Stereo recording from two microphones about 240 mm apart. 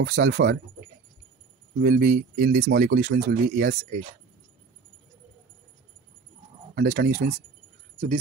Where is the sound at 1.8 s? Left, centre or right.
Right.